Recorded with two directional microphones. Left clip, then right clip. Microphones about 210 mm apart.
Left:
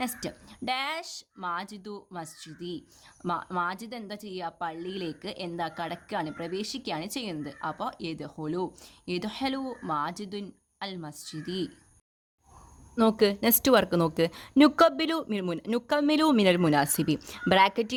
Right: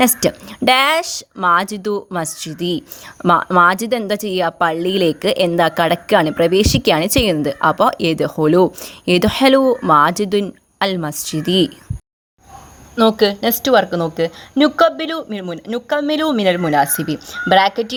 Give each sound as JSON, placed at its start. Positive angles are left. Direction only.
{"t": 0.0, "sound": "a woman's voice", "side_deg": -35}
{"t": 13.0, "sound": "speech", "side_deg": 20}
{"t": 16.8, "sound": "speech", "side_deg": 55}
{"t": 17.2, "sound": "speech", "side_deg": 30}